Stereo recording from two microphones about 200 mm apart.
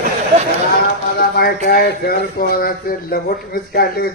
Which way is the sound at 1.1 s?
50° left (ahead or behind).